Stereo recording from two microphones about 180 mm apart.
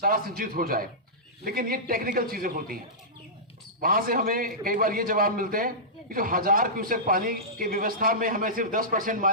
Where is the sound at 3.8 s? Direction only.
55° right (ahead or behind).